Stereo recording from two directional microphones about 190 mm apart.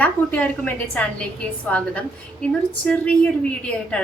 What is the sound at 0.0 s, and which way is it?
A woman's voice, 10° left (ahead or behind).